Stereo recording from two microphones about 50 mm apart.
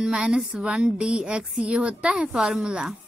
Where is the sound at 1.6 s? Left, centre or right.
Right.